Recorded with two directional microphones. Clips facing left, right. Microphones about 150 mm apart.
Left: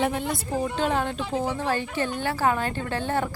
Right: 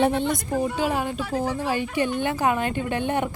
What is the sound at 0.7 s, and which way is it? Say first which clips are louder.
Speech: even; 10° right (ahead or behind).